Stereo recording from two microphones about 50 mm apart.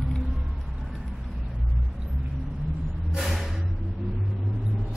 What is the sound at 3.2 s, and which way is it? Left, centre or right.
Vehicle, centre.